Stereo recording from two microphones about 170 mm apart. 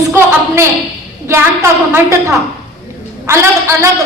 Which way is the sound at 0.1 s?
15° right (ahead or behind).